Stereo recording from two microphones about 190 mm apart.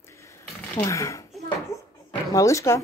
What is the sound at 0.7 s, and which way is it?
Speech, 15° left (ahead or behind).